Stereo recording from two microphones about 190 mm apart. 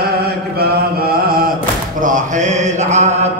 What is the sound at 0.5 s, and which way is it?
Chant, 55° right (ahead or behind).